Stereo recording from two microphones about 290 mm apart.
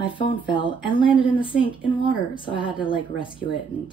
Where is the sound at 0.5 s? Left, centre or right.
Centre.